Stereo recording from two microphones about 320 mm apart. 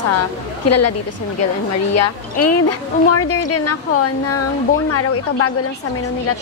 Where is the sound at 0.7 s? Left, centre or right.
Left.